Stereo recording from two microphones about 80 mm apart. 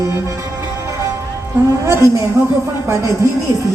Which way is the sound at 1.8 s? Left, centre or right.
Right.